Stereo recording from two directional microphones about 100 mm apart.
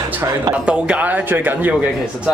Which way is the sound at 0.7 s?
10° right (ahead or behind).